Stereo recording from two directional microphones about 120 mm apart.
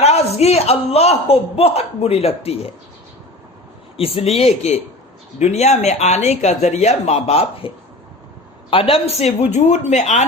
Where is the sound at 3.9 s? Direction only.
55° left (ahead or behind).